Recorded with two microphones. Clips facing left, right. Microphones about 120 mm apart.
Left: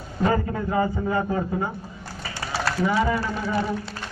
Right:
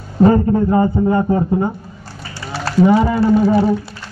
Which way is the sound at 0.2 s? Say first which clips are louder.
Right 11 dB; 35° right (ahead or behind).